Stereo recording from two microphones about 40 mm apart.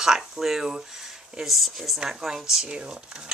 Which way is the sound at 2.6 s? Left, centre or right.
Right.